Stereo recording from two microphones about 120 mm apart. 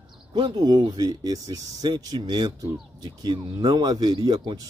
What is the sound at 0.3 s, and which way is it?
Speech, 40° right (ahead or behind).